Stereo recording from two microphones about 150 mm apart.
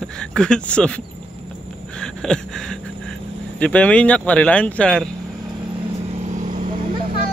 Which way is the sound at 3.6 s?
10° left (ahead or behind).